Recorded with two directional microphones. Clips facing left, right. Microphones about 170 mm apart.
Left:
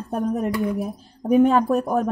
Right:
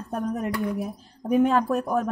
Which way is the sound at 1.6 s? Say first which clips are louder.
Left 4 dB; 30° left (ahead or behind).